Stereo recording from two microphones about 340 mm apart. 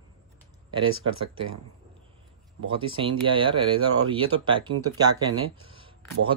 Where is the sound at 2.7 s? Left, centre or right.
Centre.